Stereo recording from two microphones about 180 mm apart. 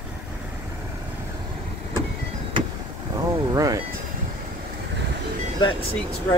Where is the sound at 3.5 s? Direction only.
20° right (ahead or behind).